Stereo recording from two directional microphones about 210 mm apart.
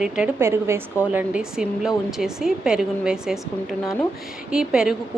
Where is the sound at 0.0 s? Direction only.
10° right (ahead or behind).